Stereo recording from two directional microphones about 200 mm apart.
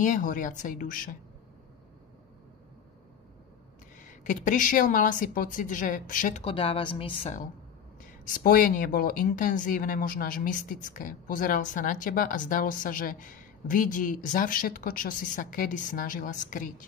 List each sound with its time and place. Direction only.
0.0 s a woman's voice: 40° left (ahead or behind)
4.0 s a woman's voice: 40° left (ahead or behind)
6.4 s a woman's voice: 30° left (ahead or behind)
8.0 s speech: 45° left (ahead or behind)